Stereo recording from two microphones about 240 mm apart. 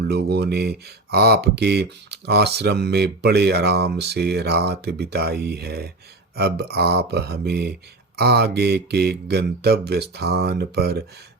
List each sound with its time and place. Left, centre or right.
0.1 s speech: right